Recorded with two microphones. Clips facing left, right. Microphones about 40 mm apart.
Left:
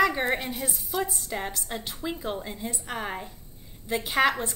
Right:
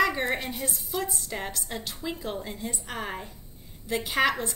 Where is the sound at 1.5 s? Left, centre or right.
Centre.